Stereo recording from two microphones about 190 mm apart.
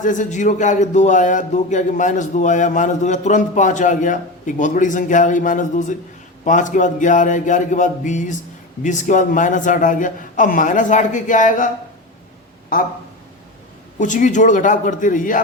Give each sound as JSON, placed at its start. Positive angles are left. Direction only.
{"t": 0.0, "sound": "a man's voice", "side_deg": 40}
{"t": 14.0, "sound": "a man's voice", "side_deg": 40}